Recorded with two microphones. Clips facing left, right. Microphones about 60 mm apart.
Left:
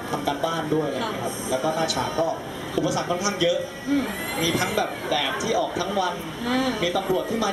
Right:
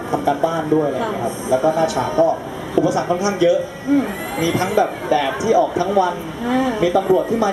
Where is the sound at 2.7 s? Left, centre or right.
Right.